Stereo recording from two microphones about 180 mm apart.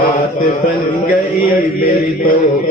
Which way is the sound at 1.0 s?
55° left (ahead or behind).